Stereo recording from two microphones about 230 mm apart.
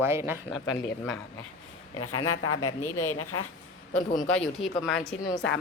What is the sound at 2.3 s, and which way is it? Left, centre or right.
A woman's voice, left.